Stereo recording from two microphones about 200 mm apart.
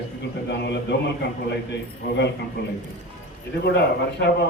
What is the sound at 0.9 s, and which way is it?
Speech, 60° left (ahead or behind).